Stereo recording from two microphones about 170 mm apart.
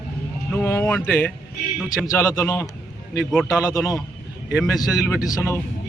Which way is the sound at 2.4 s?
20° left (ahead or behind).